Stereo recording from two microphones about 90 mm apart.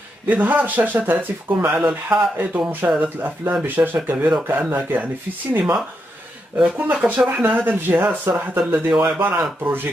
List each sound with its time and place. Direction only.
0.3 s speech: 20° right (ahead or behind)